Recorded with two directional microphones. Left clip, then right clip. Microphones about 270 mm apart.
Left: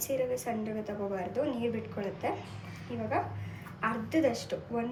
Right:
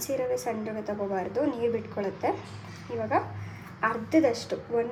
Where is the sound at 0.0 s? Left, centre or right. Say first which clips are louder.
Right 3 dB; right.